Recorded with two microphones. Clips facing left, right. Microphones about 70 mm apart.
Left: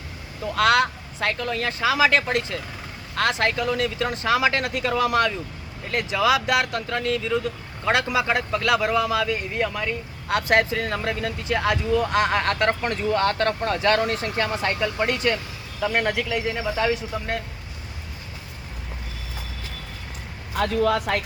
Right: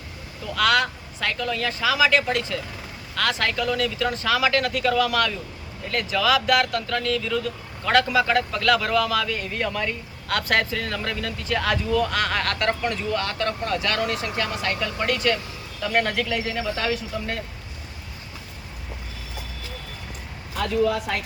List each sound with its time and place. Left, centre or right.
0.4 s a man's voice: left; by 17.3 s centre